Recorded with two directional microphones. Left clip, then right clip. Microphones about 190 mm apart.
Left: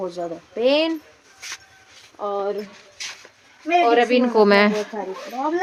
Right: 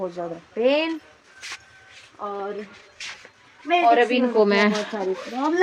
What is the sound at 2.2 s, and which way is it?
Speech, 15° left (ahead or behind).